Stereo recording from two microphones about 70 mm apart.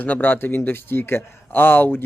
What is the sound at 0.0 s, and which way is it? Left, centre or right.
Speech, left.